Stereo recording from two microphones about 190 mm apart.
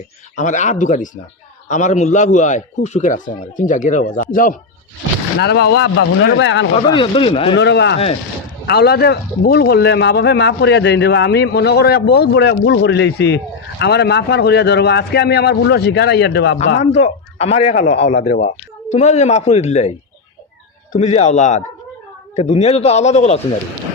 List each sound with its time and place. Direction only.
0.3 s a man's voice: 40° left (ahead or behind)
5.4 s speech: 60° left (ahead or behind)
6.9 s speech: 25° left (ahead or behind)
7.5 s a man's voice: 65° left (ahead or behind)
16.8 s a man's voice: 35° left (ahead or behind)